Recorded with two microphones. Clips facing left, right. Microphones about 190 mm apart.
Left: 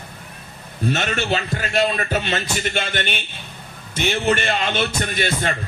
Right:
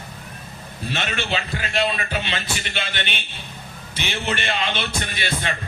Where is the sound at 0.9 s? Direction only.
45° left (ahead or behind).